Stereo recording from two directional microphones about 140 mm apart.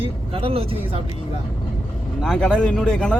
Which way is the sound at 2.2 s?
5° left (ahead or behind).